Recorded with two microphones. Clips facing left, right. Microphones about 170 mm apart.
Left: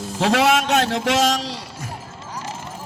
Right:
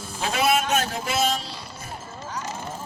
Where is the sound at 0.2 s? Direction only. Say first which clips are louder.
Left 5 dB; 90° left.